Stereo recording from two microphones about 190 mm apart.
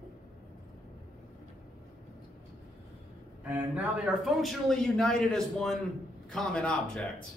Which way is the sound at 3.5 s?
5° right (ahead or behind).